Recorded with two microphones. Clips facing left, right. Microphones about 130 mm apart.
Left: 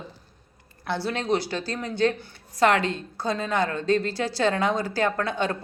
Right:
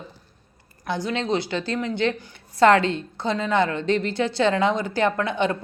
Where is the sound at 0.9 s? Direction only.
15° right (ahead or behind).